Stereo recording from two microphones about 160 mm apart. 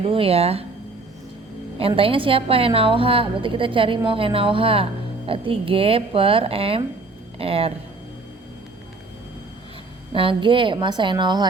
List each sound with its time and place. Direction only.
0.0 s a woman's voice: 35° right (ahead or behind)
2.0 s a woman's voice: 35° right (ahead or behind)
10.1 s a woman's voice: 35° right (ahead or behind)